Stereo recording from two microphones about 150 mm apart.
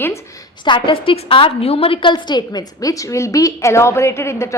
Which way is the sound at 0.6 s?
30° left (ahead or behind).